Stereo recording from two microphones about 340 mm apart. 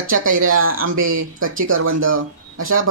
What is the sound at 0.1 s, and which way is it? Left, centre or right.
Speech, right.